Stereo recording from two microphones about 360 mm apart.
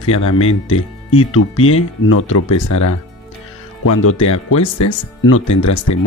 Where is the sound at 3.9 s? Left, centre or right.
Left.